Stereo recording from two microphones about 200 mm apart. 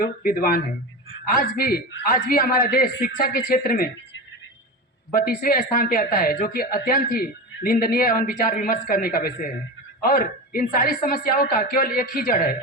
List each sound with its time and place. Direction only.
0.0 s speech: 45° left (ahead or behind)
5.1 s speech: 45° left (ahead or behind)